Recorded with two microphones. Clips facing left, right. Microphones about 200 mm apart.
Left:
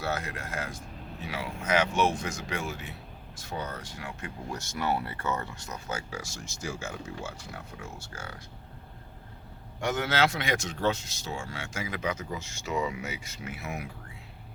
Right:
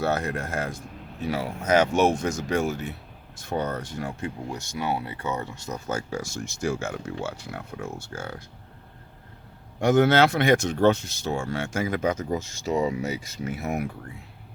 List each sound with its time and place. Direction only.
0.0 s speech: 50° right (ahead or behind)
4.5 s speech: 15° right (ahead or behind)
5.9 s speech: 45° right (ahead or behind)
9.8 s speech: 60° right (ahead or behind)